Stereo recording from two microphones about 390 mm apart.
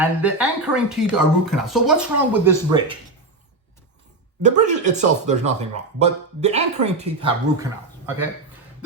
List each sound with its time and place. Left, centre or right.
0.0 s speech: centre
4.4 s speech: centre